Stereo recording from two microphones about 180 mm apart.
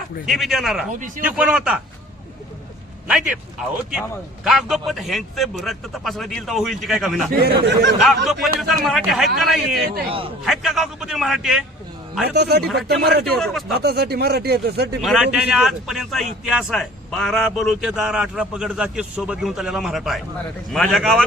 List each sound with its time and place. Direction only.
0.3 s a man's voice: centre (ahead or behind)
0.9 s a man's voice: 45° right (ahead or behind)
1.2 s a man's voice: 5° right (ahead or behind)
3.1 s a man's voice: 5° right (ahead or behind)
7.3 s speech: 60° right (ahead or behind)
7.9 s a man's voice: centre (ahead or behind)
10.1 s a man's voice: 30° right (ahead or behind)
10.4 s a man's voice: centre (ahead or behind)
12.2 s speech: 65° right (ahead or behind)
12.6 s a man's voice: centre (ahead or behind)
13.0 s speech: 65° right (ahead or behind)
13.2 s a man's voice: centre (ahead or behind)
13.7 s speech: 60° right (ahead or behind)
15.0 s a man's voice: 5° right (ahead or behind)